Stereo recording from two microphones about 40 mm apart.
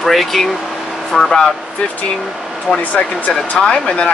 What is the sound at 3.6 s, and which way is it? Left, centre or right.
Speech, left.